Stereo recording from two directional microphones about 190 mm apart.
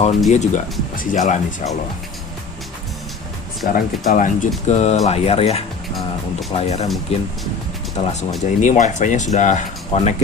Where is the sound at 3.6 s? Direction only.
50° left (ahead or behind).